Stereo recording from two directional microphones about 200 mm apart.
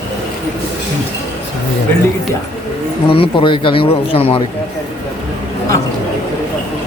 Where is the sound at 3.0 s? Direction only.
25° left (ahead or behind).